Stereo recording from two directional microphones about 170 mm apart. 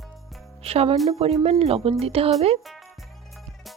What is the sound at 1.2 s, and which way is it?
Speech, 35° right (ahead or behind).